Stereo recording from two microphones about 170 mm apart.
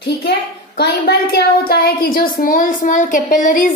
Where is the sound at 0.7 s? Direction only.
65° left (ahead or behind).